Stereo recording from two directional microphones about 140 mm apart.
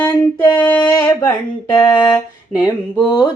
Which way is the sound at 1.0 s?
20° left (ahead or behind).